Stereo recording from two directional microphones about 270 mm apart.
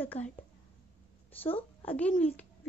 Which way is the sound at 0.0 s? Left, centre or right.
Centre.